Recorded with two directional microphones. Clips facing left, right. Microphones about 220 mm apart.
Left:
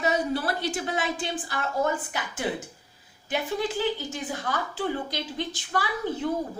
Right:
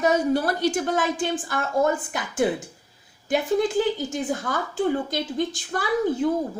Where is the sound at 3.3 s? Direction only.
45° right (ahead or behind).